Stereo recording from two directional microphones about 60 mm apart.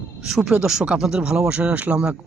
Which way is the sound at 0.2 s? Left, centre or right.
Centre.